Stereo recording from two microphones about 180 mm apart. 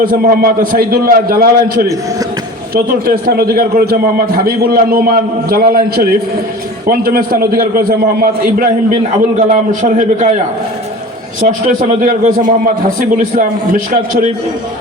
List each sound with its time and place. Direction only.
0.0 s a man's voice: 55° right (ahead or behind)
11.3 s a man's voice: 50° right (ahead or behind)